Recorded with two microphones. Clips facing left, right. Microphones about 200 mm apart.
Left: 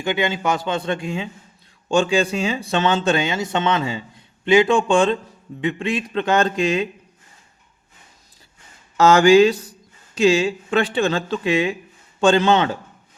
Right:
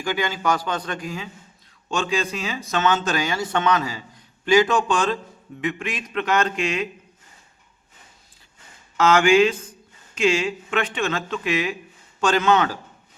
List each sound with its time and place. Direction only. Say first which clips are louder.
0.0 s a man's voice: left 3 dB; 25° left (ahead or behind)
9.0 s a man's voice: left 4 dB; 35° left (ahead or behind)